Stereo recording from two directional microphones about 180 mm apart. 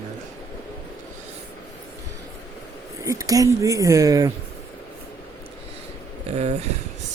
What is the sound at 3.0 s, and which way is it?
Speech, 20° right (ahead or behind).